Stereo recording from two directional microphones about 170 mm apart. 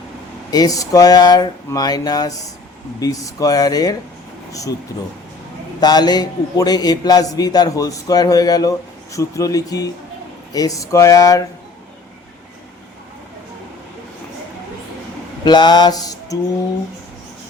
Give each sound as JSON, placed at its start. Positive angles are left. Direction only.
{"t": 0.5, "sound": "a man's voice", "side_deg": 20}
{"t": 5.8, "sound": "a man's voice", "side_deg": 25}
{"t": 15.4, "sound": "a man's voice", "side_deg": 25}